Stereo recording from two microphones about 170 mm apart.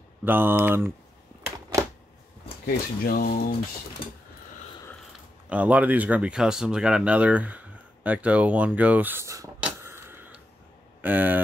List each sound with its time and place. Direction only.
0.2 s speech: 10° right (ahead or behind)
2.6 s speech: 60° left (ahead or behind)
5.5 s speech: 10° right (ahead or behind)
9.6 s a sound: 10° right (ahead or behind)
11.0 s speech: 10° right (ahead or behind)